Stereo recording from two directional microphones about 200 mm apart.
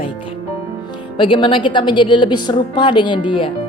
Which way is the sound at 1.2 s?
25° left (ahead or behind).